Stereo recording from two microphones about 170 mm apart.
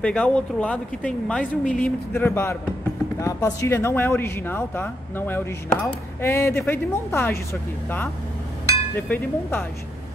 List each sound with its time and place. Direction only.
0.0 s speech: 5° left (ahead or behind)
9.1 s speech: 10° left (ahead or behind)